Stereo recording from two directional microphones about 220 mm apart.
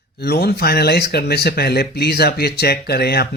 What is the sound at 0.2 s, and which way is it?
Speech, 45° left (ahead or behind).